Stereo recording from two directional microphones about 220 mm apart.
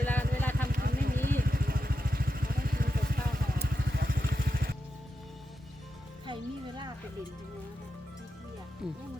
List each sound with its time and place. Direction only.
0.0 s vehicle: 10° left (ahead or behind)
0.7 s vehicle: 45° right (ahead or behind)
6.2 s music: 20° right (ahead or behind)
8.8 s music: centre (ahead or behind)